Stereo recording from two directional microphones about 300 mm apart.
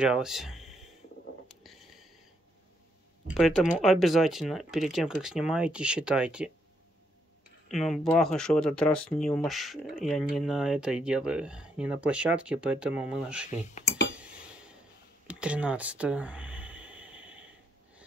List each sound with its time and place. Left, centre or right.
0.0 s speech: centre
1.5 s a sound: centre
3.3 s speech: centre
7.6 s speech: centre
13.5 s speech: left
15.2 s a sound: centre